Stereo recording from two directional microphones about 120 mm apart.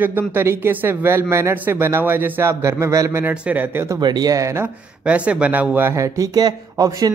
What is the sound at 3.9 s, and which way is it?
Speech, 35° right (ahead or behind).